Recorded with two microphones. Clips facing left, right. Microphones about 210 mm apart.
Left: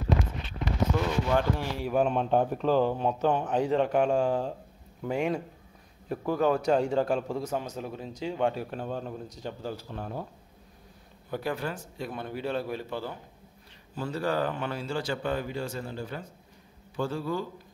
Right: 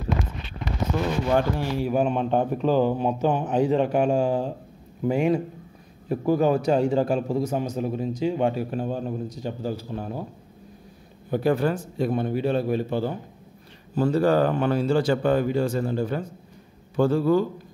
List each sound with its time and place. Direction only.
1.6 s speech: 5° right (ahead or behind)
11.2 s speech: 25° right (ahead or behind)
11.5 s speech: 45° right (ahead or behind)
12.2 s a man's voice: 20° right (ahead or behind)
13.9 s speech: 45° right (ahead or behind)